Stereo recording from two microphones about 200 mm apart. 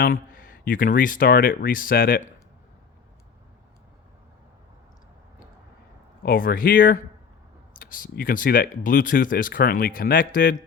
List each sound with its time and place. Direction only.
0.0 s speech: 45° left (ahead or behind)
6.2 s speech: 45° left (ahead or behind)